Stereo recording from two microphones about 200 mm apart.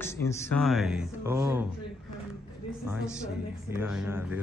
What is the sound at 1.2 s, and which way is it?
Speech, 15° right (ahead or behind).